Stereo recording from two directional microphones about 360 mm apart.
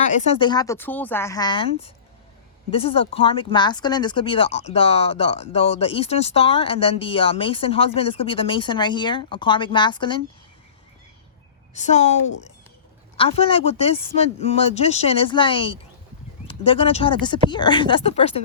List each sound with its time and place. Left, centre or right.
0.3 s speech: centre
11.7 s a woman's voice: centre